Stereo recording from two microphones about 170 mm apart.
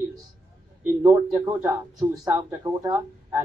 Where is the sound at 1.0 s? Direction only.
20° right (ahead or behind).